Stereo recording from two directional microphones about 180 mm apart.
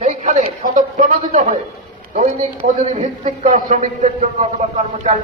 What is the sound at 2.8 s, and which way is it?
Speech, 45° right (ahead or behind).